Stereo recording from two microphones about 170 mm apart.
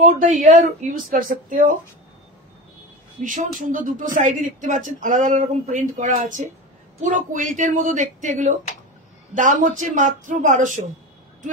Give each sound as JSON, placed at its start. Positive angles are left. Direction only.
{"t": 0.0, "sound": "speech", "side_deg": -50}
{"t": 3.3, "sound": "speech", "side_deg": -50}